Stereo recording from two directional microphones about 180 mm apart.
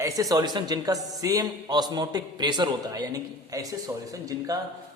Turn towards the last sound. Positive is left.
turn(degrees=-20)  # may be behind; listen again after turning